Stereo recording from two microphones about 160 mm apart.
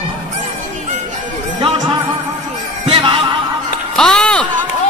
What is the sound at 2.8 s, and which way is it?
Snicker, 35° right (ahead or behind).